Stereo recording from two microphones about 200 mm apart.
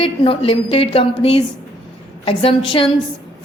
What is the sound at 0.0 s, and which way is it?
A woman's voice, 30° left (ahead or behind).